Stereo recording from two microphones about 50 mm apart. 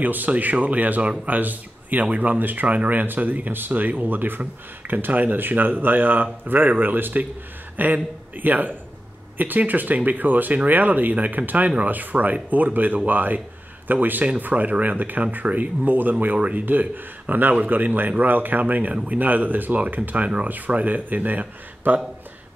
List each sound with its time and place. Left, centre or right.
0.0 s a man's voice: right